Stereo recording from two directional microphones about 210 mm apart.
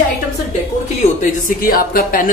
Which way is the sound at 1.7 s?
45° left (ahead or behind).